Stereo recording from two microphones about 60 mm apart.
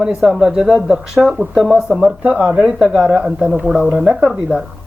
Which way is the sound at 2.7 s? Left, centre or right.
Centre.